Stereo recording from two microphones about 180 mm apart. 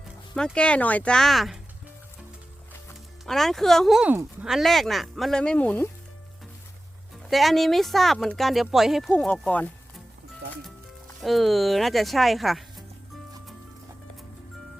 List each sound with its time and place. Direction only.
0.3 s speech: 5° left (ahead or behind)
3.2 s speech: centre (ahead or behind)
7.3 s speech: centre (ahead or behind)
11.2 s speech: centre (ahead or behind)